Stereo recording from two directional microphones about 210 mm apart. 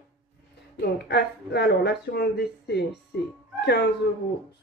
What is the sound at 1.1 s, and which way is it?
Speech, 55° left (ahead or behind).